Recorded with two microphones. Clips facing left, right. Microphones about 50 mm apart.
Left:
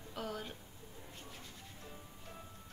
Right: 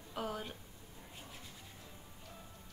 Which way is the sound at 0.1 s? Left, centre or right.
Centre.